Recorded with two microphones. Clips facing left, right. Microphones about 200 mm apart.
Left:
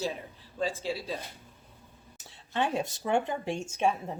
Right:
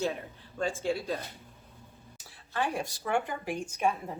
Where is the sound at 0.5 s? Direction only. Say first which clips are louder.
Right 1 dB; 5° left (ahead or behind).